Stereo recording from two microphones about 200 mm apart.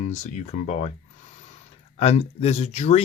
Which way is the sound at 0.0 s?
35° left (ahead or behind).